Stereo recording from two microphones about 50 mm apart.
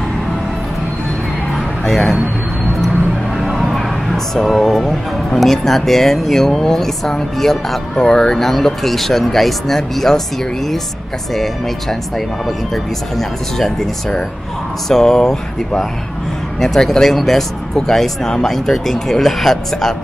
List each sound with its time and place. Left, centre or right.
1.9 s speech: centre
3.3 s speech: centre
11.3 s speech: centre
14.9 s speech: centre